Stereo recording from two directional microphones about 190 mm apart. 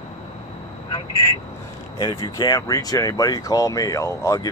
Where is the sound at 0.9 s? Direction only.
20° left (ahead or behind).